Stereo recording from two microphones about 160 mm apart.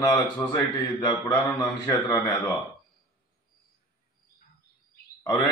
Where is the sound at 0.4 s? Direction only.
20° left (ahead or behind).